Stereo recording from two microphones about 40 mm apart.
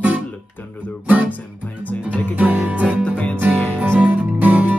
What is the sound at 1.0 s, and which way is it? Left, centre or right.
Music, right.